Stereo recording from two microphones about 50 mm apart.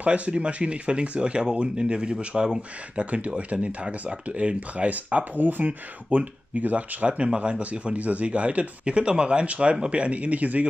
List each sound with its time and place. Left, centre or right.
0.0 s speech: right
3.1 s speech: right